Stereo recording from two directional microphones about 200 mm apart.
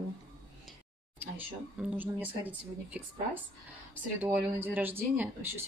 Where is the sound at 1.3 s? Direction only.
10° right (ahead or behind).